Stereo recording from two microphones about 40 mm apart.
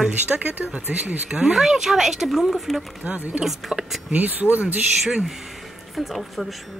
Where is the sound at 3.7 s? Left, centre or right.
Right.